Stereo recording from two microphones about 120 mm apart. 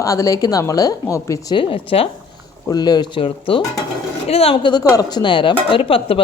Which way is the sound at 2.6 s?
35° left (ahead or behind).